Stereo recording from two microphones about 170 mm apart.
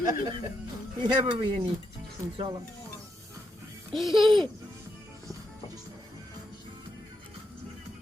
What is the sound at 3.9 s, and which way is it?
Speech, centre (ahead or behind).